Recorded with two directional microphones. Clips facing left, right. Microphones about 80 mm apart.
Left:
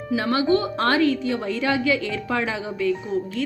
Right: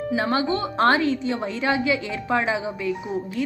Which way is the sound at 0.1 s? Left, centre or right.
Right.